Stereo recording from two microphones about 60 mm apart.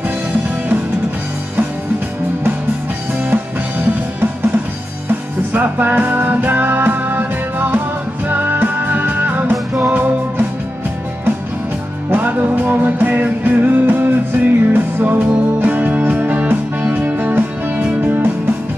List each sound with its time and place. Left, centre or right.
3.3 s music: right
5.5 s music: right
12.1 s music: right